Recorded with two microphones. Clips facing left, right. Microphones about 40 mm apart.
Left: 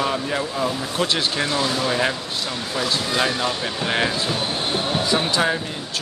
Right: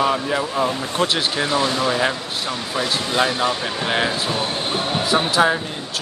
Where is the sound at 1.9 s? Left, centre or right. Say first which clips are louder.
Right 2 dB; centre.